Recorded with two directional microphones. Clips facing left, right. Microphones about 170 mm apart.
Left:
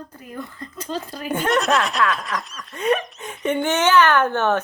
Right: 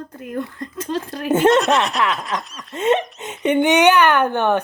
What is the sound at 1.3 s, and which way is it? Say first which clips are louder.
Speech: right 8 dB; 25° right (ahead or behind).